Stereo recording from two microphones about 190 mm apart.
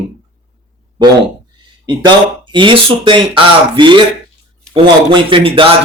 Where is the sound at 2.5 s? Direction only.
25° right (ahead or behind).